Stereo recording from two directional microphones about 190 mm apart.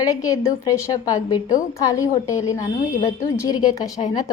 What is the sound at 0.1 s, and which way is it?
A woman's voice, 20° left (ahead or behind).